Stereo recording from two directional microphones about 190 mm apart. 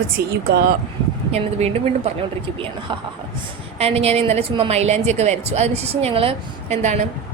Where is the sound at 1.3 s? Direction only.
35° right (ahead or behind).